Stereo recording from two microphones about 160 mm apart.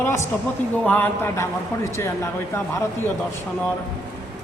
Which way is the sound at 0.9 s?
10° left (ahead or behind).